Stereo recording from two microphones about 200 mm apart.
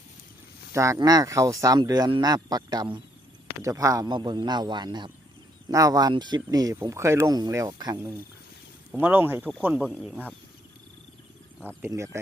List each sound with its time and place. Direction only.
0.7 s speech: 15° right (ahead or behind)
8.9 s speech: 10° right (ahead or behind)
11.8 s speech: 15° right (ahead or behind)